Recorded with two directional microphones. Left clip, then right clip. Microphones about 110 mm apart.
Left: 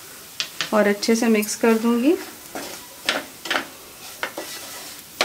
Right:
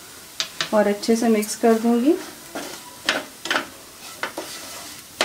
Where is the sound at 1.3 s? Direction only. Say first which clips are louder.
Right 2 dB; 30° left (ahead or behind).